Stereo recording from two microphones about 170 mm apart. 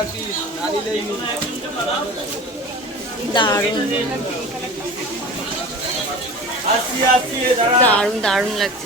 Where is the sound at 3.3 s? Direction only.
25° left (ahead or behind).